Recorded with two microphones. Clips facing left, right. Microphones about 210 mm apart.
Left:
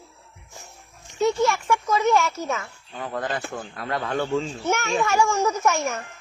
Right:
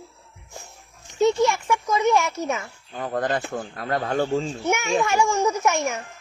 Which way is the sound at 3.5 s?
40° right (ahead or behind).